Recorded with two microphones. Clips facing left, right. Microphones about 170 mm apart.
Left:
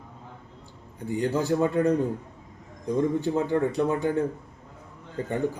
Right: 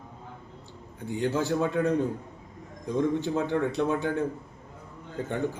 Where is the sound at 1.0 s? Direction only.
10° left (ahead or behind).